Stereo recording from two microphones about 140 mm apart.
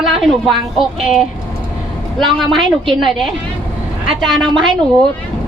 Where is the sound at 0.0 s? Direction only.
Centre (ahead or behind).